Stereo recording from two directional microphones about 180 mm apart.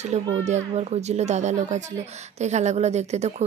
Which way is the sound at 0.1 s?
35° right (ahead or behind).